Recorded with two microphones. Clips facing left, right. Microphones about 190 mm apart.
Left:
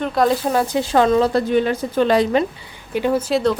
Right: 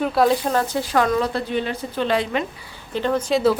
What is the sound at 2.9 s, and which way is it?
Speech, 10° left (ahead or behind).